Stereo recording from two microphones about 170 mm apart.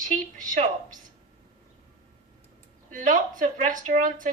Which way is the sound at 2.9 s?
50° right (ahead or behind).